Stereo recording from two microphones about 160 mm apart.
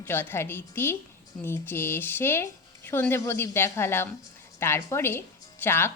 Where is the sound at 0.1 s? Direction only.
15° left (ahead or behind).